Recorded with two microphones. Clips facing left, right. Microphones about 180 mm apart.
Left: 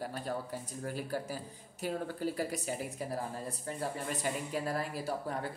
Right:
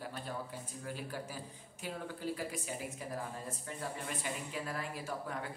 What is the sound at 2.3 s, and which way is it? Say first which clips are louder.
Speech: left 5 dB; 40° left (ahead or behind).